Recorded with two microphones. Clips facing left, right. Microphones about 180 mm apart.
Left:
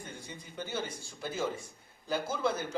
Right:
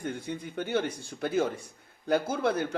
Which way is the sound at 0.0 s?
60° right (ahead or behind).